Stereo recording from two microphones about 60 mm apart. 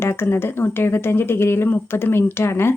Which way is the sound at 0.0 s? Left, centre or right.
Left.